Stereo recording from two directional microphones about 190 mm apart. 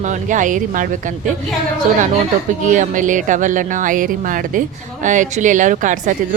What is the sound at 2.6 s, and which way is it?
Speech, 45° right (ahead or behind).